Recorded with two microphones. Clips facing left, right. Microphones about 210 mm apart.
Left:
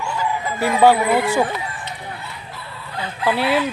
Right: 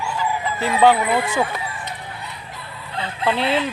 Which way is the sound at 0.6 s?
10° left (ahead or behind).